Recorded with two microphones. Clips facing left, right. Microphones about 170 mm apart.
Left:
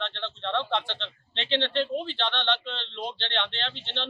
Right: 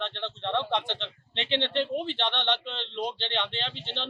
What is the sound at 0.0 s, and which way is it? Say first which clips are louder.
Speech: even; 15° right (ahead or behind).